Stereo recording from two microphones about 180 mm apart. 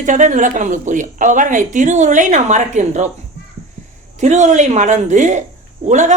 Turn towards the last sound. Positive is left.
turn(degrees=-40)  # may be behind; listen again after turning